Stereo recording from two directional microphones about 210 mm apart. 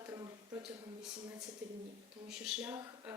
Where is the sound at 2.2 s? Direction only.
5° right (ahead or behind).